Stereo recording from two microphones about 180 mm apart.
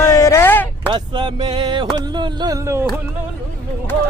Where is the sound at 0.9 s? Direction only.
25° right (ahead or behind).